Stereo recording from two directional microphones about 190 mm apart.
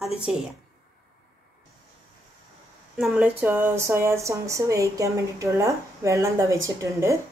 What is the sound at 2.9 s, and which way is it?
Speech, 5° right (ahead or behind).